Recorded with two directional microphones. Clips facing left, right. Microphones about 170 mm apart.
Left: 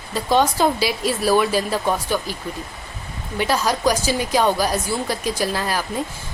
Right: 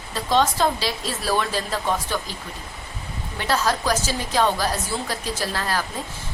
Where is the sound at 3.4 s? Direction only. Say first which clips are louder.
Left 2 dB; 10° left (ahead or behind).